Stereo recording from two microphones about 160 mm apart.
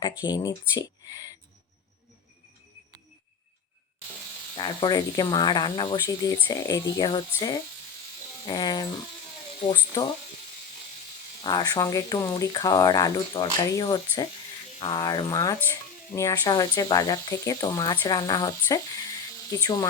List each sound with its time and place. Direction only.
0.0 s speech: 25° left (ahead or behind)
4.5 s speech: 30° left (ahead or behind)
11.4 s speech: 25° left (ahead or behind)